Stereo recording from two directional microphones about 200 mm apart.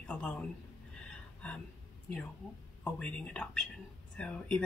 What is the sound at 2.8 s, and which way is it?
Speech, 5° left (ahead or behind).